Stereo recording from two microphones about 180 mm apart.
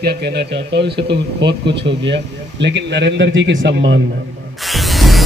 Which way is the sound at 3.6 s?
90° right.